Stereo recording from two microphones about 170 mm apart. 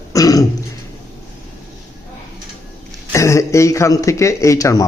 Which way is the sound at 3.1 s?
15° left (ahead or behind).